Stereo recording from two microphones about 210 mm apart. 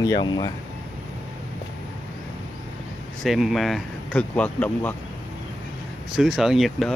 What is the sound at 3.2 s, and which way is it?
Speech, centre (ahead or behind).